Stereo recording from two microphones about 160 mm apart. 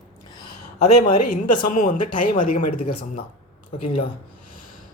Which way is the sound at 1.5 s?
55° left (ahead or behind).